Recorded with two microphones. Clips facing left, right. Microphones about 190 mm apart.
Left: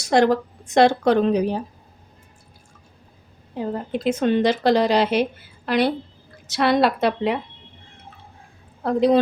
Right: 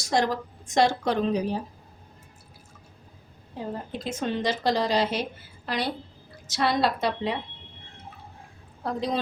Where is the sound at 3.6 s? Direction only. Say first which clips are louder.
Left 8 dB; 65° left (ahead or behind).